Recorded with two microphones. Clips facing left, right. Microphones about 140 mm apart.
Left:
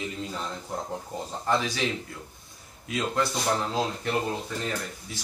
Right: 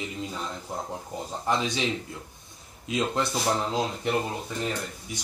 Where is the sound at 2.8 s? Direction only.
20° right (ahead or behind).